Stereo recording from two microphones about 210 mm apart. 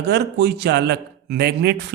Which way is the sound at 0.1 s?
50° right (ahead or behind).